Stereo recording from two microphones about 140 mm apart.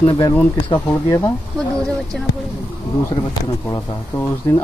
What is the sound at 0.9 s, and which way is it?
Speech, 20° left (ahead or behind).